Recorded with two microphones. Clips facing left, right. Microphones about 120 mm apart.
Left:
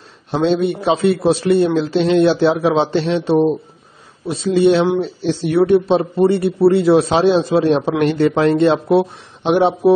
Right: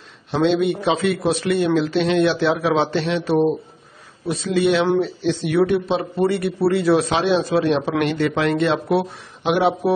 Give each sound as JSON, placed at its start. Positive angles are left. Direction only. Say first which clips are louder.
{"t": 0.3, "sound": "speech", "louder": "left 2 dB", "side_deg": 40}